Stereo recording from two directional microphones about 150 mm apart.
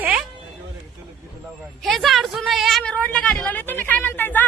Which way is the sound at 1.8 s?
Centre (ahead or behind).